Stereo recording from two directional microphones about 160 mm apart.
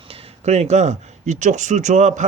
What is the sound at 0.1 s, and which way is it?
A man's voice, 40° right (ahead or behind).